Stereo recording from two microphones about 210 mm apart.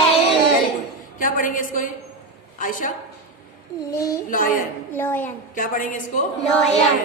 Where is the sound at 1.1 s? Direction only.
40° left (ahead or behind).